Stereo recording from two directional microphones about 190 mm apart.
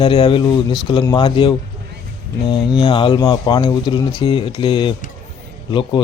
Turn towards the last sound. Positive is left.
turn(degrees=25)  # may be behind; listen again after turning